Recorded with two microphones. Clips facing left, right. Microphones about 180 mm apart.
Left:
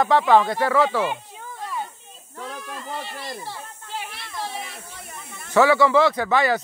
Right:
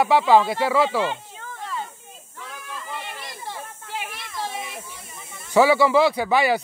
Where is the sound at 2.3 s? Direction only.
45° left (ahead or behind).